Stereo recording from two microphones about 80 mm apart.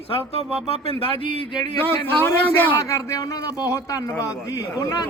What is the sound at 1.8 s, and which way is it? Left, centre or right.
Speech, left.